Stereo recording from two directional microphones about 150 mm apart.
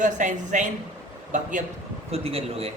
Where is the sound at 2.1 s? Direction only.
40° right (ahead or behind).